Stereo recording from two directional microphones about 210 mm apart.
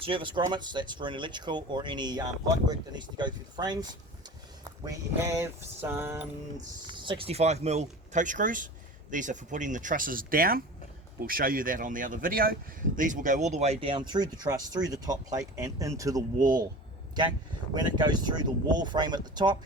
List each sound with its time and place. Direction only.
0.0 s speech: 25° right (ahead or behind)
6.8 s speech: 20° right (ahead or behind)
17.7 s speech: 20° right (ahead or behind)